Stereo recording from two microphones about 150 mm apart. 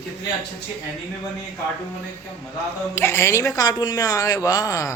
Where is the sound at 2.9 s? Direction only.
15° left (ahead or behind).